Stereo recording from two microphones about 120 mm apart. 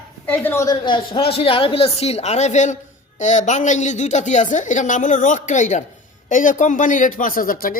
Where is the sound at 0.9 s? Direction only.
50° left (ahead or behind); by 2.7 s 80° left.